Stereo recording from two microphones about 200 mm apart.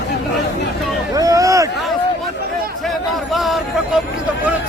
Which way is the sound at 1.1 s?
15° right (ahead or behind).